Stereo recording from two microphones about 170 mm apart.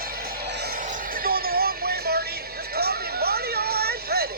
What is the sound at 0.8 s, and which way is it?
Music, 50° right (ahead or behind).